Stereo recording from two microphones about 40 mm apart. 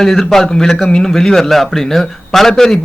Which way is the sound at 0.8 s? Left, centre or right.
Left.